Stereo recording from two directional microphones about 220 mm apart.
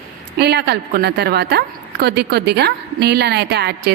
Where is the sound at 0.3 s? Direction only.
50° right (ahead or behind).